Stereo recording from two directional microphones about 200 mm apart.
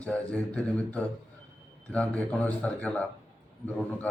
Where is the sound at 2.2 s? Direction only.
5° left (ahead or behind).